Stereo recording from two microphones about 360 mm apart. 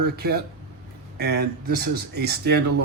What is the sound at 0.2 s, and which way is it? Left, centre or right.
Speech, right.